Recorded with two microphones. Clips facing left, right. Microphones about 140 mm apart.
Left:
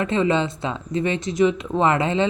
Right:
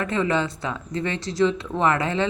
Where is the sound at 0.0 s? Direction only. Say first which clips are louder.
Left 3 dB; 20° left (ahead or behind).